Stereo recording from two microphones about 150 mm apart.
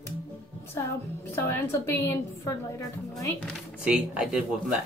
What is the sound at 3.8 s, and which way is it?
Speech, 5° right (ahead or behind).